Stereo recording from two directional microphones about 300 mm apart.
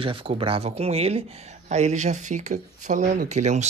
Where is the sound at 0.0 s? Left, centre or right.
Centre.